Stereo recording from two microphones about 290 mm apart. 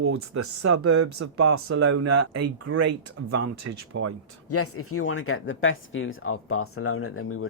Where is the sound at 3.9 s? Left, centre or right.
Right.